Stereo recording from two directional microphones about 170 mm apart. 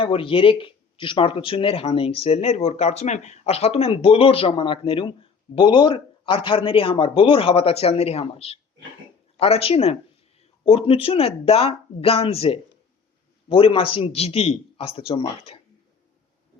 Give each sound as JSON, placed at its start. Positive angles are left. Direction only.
{"t": 0.0, "sound": "speech", "side_deg": 30}